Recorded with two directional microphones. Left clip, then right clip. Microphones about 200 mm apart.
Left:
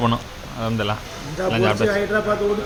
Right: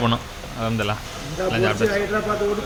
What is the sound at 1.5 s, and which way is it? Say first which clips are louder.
Speech: left 2 dB; 20° left (ahead or behind).